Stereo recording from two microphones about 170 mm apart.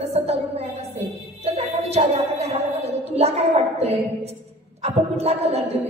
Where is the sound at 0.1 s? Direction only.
35° right (ahead or behind).